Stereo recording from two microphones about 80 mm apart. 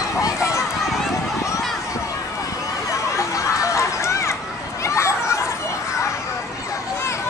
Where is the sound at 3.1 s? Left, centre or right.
Left.